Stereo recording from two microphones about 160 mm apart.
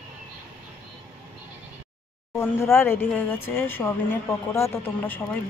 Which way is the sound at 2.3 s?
15° left (ahead or behind).